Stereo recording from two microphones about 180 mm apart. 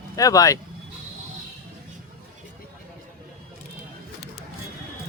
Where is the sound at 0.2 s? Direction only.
20° left (ahead or behind).